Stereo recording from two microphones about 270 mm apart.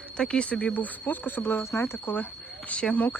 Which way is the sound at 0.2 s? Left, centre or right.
Centre.